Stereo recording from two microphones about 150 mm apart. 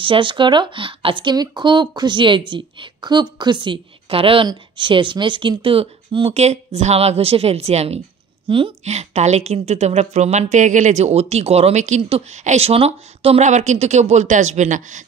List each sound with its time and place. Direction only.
0.0 s a woman's voice: 35° right (ahead or behind); by 15.0 s 55° right (ahead or behind)